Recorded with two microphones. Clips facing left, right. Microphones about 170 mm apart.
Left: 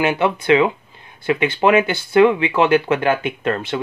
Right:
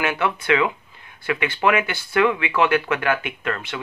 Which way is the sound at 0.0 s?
25° left (ahead or behind).